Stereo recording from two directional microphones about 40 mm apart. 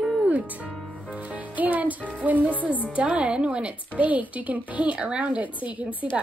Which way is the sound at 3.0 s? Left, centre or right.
Right.